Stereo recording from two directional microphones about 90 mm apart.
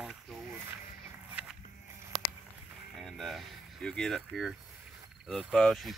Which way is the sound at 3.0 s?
Centre (ahead or behind).